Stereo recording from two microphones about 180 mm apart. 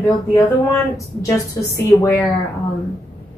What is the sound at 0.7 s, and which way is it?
A woman's voice, 15° left (ahead or behind).